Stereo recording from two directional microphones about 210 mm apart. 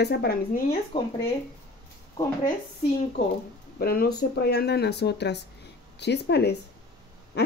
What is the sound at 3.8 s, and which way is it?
Speech, 45° left (ahead or behind).